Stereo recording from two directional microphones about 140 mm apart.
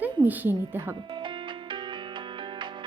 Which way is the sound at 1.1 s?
35° right (ahead or behind).